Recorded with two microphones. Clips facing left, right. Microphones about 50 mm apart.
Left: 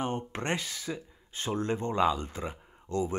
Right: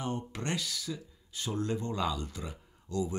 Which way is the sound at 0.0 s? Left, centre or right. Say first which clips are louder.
Left 3 dB; left.